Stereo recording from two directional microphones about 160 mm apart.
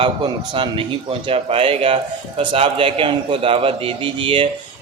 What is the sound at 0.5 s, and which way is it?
A man's voice, 30° right (ahead or behind).